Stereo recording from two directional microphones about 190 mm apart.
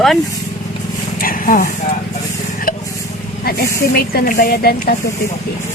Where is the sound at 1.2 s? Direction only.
45° left (ahead or behind).